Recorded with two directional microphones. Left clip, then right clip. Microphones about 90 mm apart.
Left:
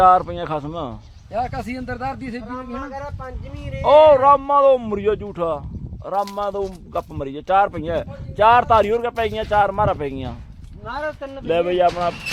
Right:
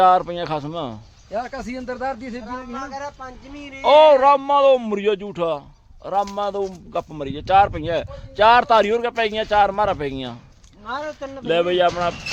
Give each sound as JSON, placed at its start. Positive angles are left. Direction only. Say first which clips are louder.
{"t": 0.0, "sound": "speech", "louder": "left 1 dB", "side_deg": -5}
{"t": 1.3, "sound": "speech", "louder": "left 2 dB", "side_deg": 0}
{"t": 2.5, "sound": "speech", "louder": "right 2 dB", "side_deg": -40}
{"t": 3.8, "sound": "speech", "louder": "left 1 dB", "side_deg": -15}
{"t": 11.4, "sound": "speech", "louder": "even", "side_deg": -5}